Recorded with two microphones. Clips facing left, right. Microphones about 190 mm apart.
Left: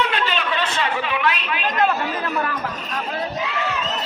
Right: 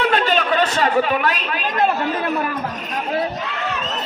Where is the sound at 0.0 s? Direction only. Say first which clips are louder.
Right 5 dB; 40° right (ahead or behind).